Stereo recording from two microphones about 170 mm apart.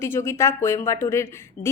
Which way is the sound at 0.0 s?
15° left (ahead or behind).